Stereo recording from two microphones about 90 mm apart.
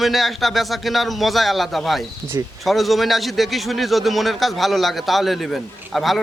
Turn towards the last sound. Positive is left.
turn(degrees=0)  # may be behind; listen again after turning